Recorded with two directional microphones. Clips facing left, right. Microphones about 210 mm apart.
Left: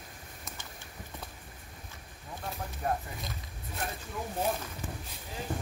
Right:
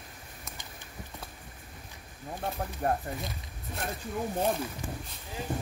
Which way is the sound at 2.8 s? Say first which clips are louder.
Right 3 dB; 45° right (ahead or behind).